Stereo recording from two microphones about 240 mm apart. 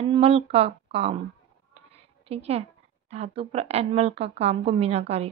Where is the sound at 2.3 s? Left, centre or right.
Right.